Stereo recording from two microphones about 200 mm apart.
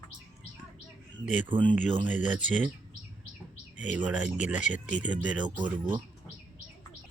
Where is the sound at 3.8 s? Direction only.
5° right (ahead or behind).